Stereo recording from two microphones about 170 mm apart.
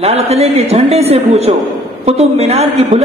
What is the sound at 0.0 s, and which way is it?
A woman's voice, 35° right (ahead or behind).